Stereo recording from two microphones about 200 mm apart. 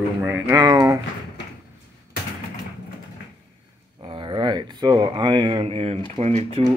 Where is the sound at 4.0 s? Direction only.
25° right (ahead or behind).